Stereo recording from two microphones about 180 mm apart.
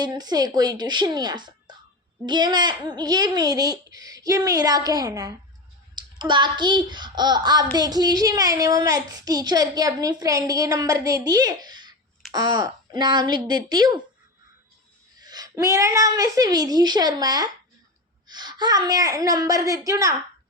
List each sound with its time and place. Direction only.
0.0 s a child's voice: 20° right (ahead or behind)
15.2 s a child's voice: 20° right (ahead or behind)